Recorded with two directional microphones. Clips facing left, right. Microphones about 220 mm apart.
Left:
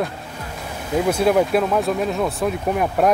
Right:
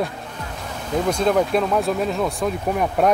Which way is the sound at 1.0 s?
10° left (ahead or behind).